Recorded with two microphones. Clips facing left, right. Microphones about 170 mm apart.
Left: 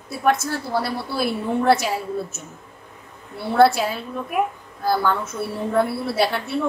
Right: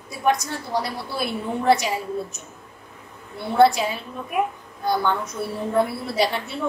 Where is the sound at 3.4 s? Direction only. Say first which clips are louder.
Left 1 dB; 5° left (ahead or behind).